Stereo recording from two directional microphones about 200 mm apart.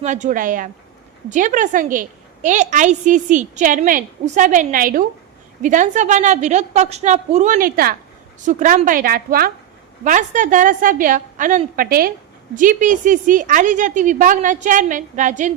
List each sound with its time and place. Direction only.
0.0 s a woman's voice: 35° right (ahead or behind)